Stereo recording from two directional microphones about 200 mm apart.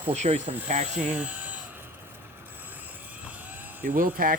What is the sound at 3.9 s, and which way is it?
Speech, 45° right (ahead or behind).